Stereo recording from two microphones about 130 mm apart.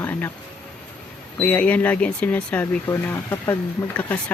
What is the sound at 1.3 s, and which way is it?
Speech, 10° left (ahead or behind).